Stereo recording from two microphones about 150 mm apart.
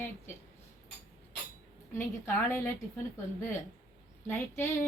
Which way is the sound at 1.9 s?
15° left (ahead or behind).